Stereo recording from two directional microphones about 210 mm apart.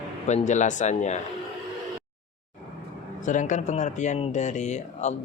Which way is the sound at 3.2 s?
35° left (ahead or behind).